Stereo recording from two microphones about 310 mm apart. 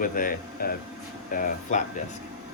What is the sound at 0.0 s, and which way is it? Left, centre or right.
Speech, left.